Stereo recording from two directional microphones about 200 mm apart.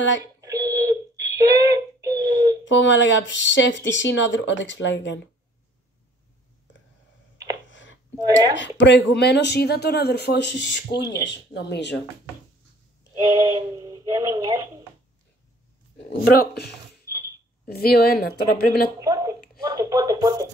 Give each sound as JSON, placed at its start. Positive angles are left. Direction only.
{"t": 0.2, "sound": "alarm clock", "side_deg": -15}
{"t": 2.6, "sound": "speech", "side_deg": 65}
{"t": 7.7, "sound": "a sound", "side_deg": 70}
{"t": 8.2, "sound": "speech", "side_deg": -20}
{"t": 8.7, "sound": "speech", "side_deg": 60}
{"t": 13.1, "sound": "speech", "side_deg": -15}
{"t": 16.3, "sound": "speech", "side_deg": 55}
{"t": 17.1, "sound": "mechanisms", "side_deg": -15}
{"t": 17.8, "sound": "speech", "side_deg": 50}
{"t": 18.9, "sound": "speech", "side_deg": -15}